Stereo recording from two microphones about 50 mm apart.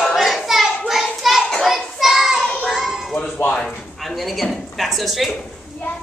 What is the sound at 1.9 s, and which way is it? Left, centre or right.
Child singing, centre.